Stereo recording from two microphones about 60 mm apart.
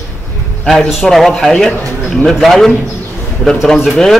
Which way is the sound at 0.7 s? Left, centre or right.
Centre.